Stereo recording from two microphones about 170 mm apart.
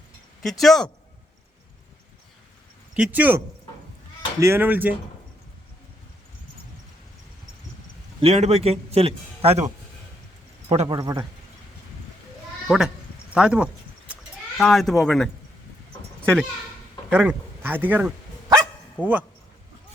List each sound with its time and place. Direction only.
0.4 s speech: centre (ahead or behind)
2.9 s speech: 10° right (ahead or behind)
8.2 s a man's voice: 35° right (ahead or behind)
10.7 s a man's voice: 35° right (ahead or behind)
10.9 s speech: 25° right (ahead or behind)
12.6 s speech: 5° right (ahead or behind)
17.1 s speech: 10° right (ahead or behind)